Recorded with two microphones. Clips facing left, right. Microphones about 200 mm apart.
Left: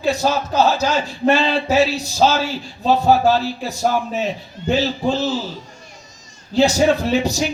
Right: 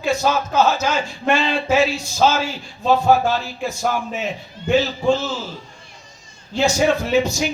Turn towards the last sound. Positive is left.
turn(degrees=35)  # may be behind; listen again after turning